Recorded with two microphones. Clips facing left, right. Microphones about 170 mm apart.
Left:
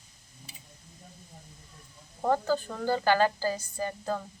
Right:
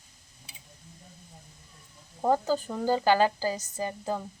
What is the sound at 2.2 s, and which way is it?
Speech, 15° right (ahead or behind).